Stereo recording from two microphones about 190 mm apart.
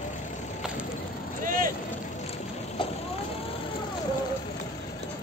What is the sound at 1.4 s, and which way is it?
Vehicle, 45° right (ahead or behind).